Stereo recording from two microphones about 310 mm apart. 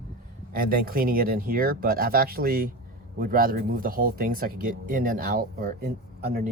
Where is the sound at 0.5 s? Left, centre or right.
Right.